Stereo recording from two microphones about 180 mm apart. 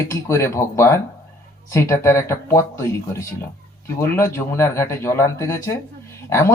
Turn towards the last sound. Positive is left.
turn(degrees=15)  # may be behind; listen again after turning